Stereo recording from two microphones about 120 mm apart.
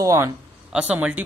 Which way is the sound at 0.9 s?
10° right (ahead or behind).